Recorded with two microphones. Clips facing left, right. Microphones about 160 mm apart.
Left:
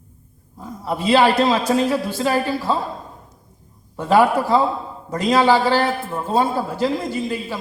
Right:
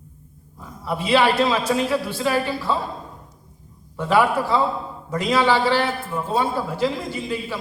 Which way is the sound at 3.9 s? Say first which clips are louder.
Left 3 dB; 40° left (ahead or behind).